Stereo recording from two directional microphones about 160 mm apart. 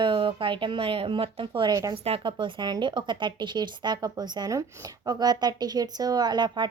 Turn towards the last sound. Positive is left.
turn(degrees=-30)  # may be behind; listen again after turning